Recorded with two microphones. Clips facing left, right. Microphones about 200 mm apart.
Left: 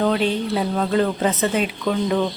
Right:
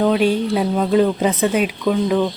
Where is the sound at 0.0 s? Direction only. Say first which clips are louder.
Right 4 dB; 10° right (ahead or behind).